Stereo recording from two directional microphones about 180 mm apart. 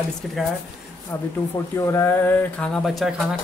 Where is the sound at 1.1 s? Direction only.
10° left (ahead or behind).